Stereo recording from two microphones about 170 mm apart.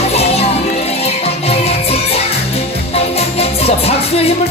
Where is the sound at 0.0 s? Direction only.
35° left (ahead or behind).